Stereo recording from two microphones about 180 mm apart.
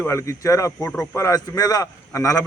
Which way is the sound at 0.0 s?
15° left (ahead or behind).